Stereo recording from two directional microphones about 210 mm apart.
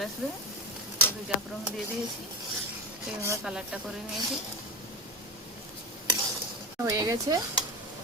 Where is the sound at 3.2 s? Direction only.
10° right (ahead or behind).